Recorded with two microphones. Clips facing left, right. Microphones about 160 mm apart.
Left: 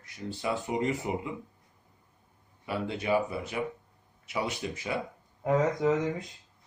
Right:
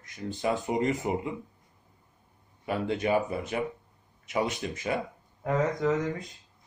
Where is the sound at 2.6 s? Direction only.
45° right (ahead or behind).